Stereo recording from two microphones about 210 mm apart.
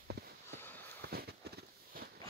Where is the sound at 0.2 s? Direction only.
50° right (ahead or behind).